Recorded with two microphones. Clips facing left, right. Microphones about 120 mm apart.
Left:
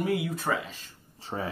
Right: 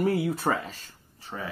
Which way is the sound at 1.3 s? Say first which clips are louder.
Left 3 dB; 25° left (ahead or behind).